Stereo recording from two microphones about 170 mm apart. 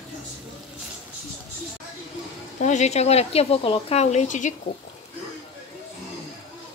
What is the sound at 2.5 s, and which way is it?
Speech, 45° left (ahead or behind).